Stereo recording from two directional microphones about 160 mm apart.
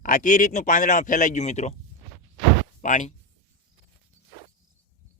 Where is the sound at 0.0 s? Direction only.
55° left (ahead or behind).